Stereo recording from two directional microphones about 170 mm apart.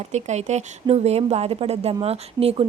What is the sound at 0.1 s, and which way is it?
Speech, 40° right (ahead or behind).